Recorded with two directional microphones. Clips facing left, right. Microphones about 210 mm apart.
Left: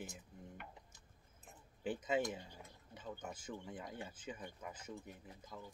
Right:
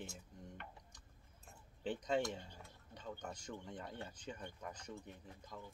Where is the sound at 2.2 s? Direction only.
15° left (ahead or behind).